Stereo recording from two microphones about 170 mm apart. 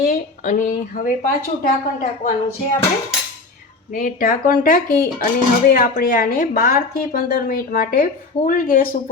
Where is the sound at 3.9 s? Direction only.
50° left (ahead or behind).